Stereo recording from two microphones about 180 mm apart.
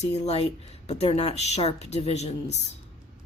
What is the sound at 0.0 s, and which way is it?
Speech, 35° left (ahead or behind).